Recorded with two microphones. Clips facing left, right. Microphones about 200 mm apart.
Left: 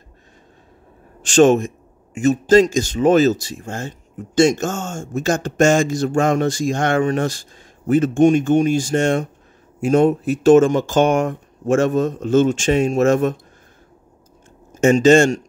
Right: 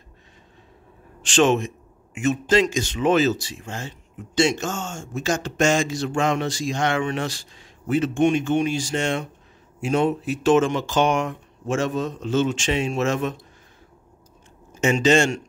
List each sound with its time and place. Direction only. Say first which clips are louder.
1.2 s speech: left 6 dB; 45° left (ahead or behind)
14.7 s speech: left 7 dB; 45° left (ahead or behind)